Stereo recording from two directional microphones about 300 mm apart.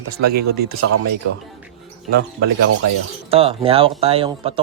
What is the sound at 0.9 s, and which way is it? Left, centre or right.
Speech, right.